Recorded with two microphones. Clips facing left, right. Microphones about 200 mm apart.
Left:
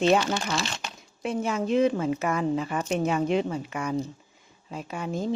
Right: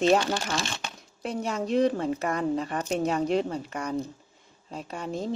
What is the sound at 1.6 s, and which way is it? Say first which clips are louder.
Speech: left 1 dB; centre (ahead or behind).